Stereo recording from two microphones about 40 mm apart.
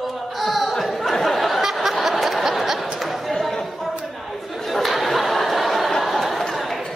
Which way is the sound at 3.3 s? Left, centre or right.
Centre.